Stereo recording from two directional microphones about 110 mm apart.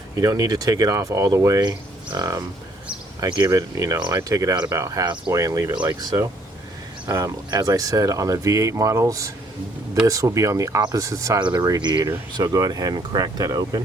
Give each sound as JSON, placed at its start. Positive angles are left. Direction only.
{"t": 0.2, "sound": "speech", "side_deg": -35}